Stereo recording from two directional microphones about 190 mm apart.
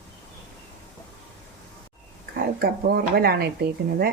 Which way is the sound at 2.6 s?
55° right (ahead or behind).